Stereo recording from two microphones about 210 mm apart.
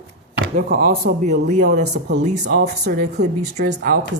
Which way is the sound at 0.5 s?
40° right (ahead or behind).